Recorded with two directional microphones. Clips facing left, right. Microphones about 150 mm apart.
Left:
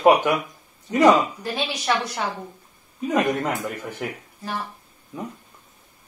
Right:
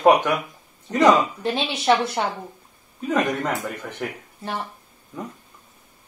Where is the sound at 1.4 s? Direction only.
25° right (ahead or behind).